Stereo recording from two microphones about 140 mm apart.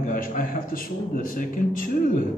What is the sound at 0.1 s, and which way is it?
A man's voice, 75° left (ahead or behind).